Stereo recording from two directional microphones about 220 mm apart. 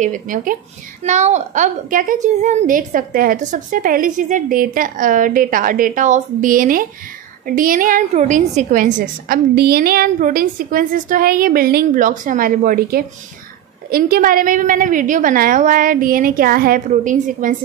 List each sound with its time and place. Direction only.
0.0 s a woman's voice: 35° right (ahead or behind)